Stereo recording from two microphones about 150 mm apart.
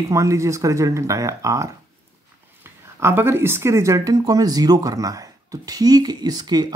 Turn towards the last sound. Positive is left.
turn(degrees=-25)  # may be behind; listen again after turning